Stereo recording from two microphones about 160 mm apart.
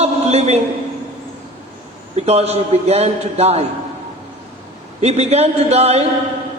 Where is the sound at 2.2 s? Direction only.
40° right (ahead or behind).